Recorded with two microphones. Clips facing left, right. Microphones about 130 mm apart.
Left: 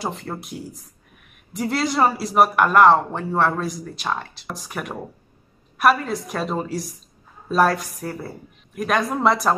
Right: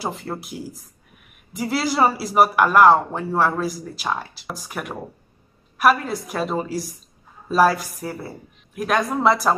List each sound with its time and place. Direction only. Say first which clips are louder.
0.0 s speech: right 1 dB; centre (ahead or behind)